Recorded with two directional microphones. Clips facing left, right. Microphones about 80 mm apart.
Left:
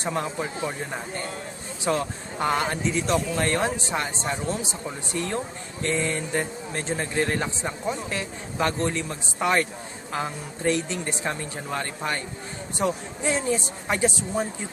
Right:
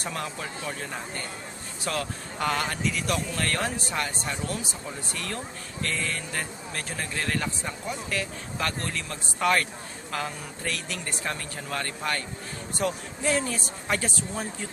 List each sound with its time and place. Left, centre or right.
0.0 s speech: left